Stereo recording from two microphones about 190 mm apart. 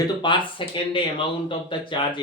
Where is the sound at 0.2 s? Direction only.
25° left (ahead or behind).